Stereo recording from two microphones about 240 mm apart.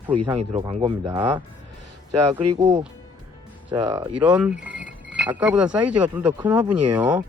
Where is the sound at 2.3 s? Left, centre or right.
Centre.